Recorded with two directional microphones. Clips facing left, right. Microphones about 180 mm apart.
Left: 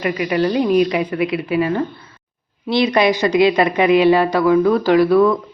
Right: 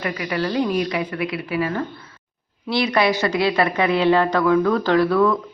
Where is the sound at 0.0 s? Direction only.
20° left (ahead or behind).